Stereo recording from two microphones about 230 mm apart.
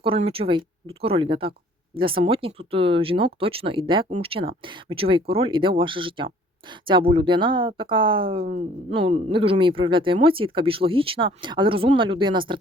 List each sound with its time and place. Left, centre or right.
0.0 s speech: right